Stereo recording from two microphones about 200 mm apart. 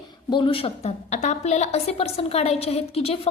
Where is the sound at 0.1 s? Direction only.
25° left (ahead or behind).